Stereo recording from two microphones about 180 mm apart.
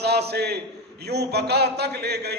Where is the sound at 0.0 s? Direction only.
65° right (ahead or behind).